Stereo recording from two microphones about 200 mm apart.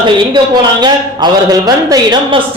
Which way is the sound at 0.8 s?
20° right (ahead or behind).